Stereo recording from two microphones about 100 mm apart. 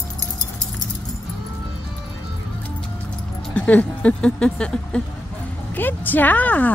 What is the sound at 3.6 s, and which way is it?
Speech, 15° left (ahead or behind).